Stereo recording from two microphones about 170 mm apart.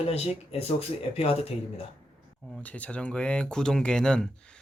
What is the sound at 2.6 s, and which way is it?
Speech, 10° left (ahead or behind).